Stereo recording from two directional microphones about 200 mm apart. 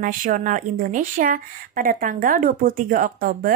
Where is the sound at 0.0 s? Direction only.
45° right (ahead or behind).